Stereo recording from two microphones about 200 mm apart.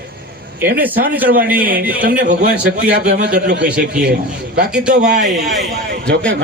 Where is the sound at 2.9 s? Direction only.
55° right (ahead or behind).